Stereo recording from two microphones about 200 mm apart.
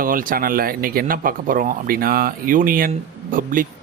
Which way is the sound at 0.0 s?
45° right (ahead or behind).